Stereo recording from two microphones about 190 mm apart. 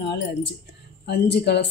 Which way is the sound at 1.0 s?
60° left (ahead or behind).